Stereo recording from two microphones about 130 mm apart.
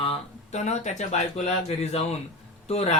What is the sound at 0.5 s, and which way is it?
A man's voice, 65° left (ahead or behind).